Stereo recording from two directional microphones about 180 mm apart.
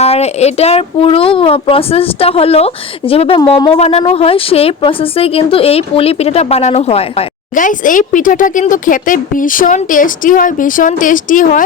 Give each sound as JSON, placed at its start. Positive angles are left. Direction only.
{"t": 0.0, "sound": "speech", "side_deg": 35}
{"t": 7.6, "sound": "speech", "side_deg": 50}